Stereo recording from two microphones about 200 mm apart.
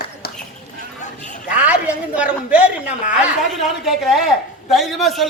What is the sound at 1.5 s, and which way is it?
A woman's voice, 5° right (ahead or behind).